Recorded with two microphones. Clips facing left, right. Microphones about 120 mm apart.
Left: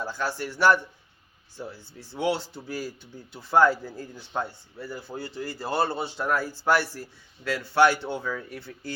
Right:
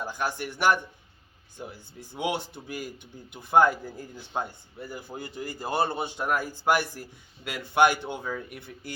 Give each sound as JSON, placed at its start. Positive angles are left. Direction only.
{"t": 0.0, "sound": "speech", "side_deg": -15}